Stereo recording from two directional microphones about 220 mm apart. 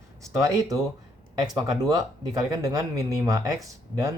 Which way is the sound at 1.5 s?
15° right (ahead or behind).